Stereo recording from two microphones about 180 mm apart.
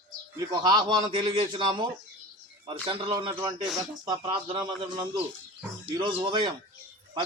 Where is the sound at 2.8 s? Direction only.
25° right (ahead or behind).